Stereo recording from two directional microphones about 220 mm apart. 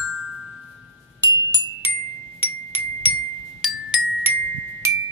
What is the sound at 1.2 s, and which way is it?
Music, 15° right (ahead or behind).